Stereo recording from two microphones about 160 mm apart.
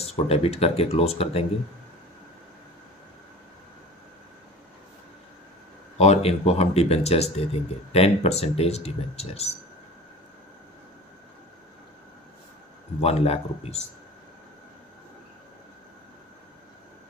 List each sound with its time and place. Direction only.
0.0 s speech: 40° left (ahead or behind)
5.9 s speech: 40° left (ahead or behind)
13.0 s speech: 40° left (ahead or behind)